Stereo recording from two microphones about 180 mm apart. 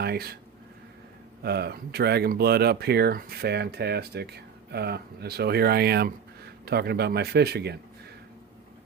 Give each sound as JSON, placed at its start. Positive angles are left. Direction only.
{"t": 0.0, "sound": "speech", "side_deg": -60}
{"t": 1.4, "sound": "speech", "side_deg": -65}